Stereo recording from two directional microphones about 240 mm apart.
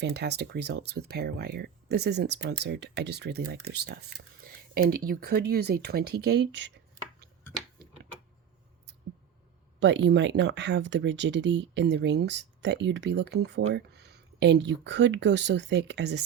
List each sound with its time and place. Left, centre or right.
0.0 s speech: right
9.8 s speech: right